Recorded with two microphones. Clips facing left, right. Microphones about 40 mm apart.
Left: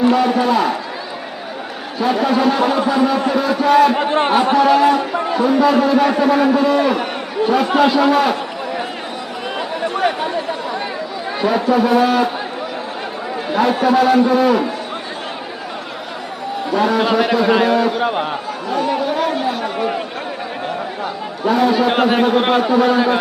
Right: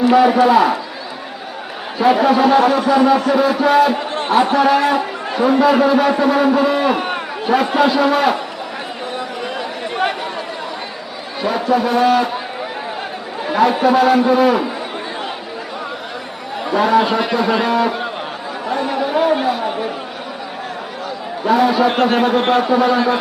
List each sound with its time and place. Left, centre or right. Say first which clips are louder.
0.1 s a man's voice: right 4 dB; centre
2.0 s a man's voice: right 3 dB; centre
3.9 s a sound: left 6 dB; left
4.5 s a man's voice: left 1 dB; centre
6.9 s a sound: even; centre
7.4 s a man's voice: even; centre
11.3 s a man's voice: left 1 dB; centre
13.5 s a man's voice: right 1 dB; centre
16.7 s a man's voice: right 1 dB; centre
18.0 s speech: left 6 dB; left
18.7 s a man's voice: even; centre
21.4 s a man's voice: right 1 dB; centre